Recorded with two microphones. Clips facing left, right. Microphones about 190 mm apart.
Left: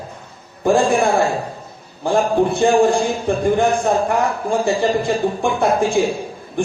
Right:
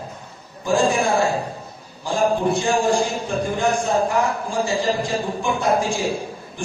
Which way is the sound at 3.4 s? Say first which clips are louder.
Left 6 dB; 55° left (ahead or behind).